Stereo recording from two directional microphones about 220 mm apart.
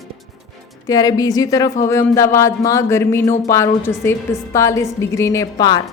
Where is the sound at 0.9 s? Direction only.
15° left (ahead or behind).